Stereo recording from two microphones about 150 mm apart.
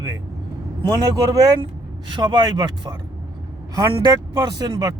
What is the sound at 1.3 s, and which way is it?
Speech, 25° right (ahead or behind).